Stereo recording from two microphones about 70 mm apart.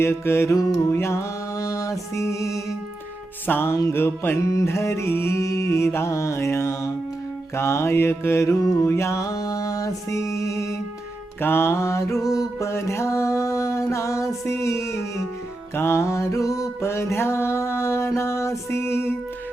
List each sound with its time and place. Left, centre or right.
0.0 s music: left
3.4 s music: left
4.4 s music: left
11.3 s music: left
12.2 s music: left
12.6 s music: left